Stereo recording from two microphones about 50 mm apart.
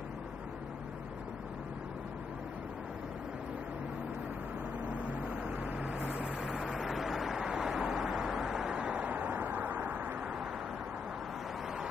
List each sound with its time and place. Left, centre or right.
4.9 s vehicle: right